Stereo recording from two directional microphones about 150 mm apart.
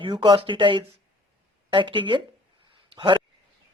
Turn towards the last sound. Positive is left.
turn(degrees=-35)  # may be behind; listen again after turning